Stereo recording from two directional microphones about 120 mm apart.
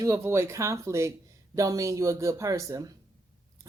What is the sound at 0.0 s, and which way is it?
Speech, 25° right (ahead or behind).